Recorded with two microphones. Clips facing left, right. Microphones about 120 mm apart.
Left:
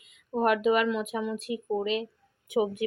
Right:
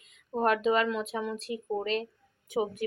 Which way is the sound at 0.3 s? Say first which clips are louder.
Left 2 dB; 10° left (ahead or behind).